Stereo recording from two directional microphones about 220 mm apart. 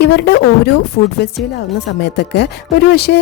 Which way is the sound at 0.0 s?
50° left (ahead or behind).